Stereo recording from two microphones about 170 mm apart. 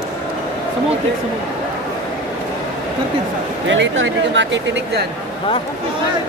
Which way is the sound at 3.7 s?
90° right.